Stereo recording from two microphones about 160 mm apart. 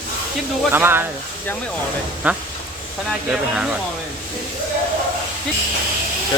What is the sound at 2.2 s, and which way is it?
Speech, 10° right (ahead or behind).